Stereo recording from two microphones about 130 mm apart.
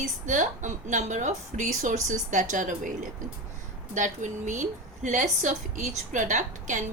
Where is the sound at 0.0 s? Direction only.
70° right (ahead or behind).